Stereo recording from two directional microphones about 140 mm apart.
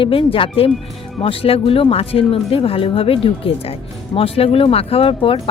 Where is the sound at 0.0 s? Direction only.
40° left (ahead or behind).